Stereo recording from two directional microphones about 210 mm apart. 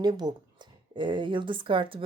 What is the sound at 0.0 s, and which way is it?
Speech, 20° right (ahead or behind).